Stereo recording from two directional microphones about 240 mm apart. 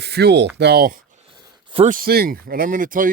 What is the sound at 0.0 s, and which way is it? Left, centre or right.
Speech, right.